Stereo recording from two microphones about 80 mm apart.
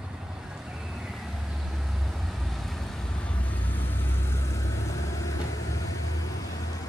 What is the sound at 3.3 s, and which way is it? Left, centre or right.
Vehicle, centre.